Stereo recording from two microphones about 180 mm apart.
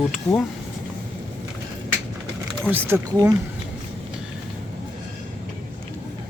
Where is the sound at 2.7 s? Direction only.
10° right (ahead or behind).